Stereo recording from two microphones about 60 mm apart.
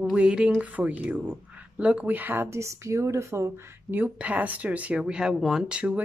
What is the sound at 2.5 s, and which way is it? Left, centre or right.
Speech, right.